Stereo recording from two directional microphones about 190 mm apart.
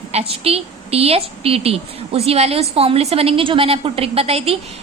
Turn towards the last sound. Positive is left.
turn(degrees=-30)  # may be behind; listen again after turning